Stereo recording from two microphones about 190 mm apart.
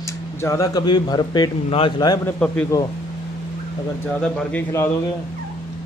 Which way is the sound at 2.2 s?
5° left (ahead or behind).